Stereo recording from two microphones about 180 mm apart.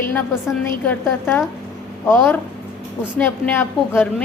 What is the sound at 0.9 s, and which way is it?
A woman's voice, 10° left (ahead or behind).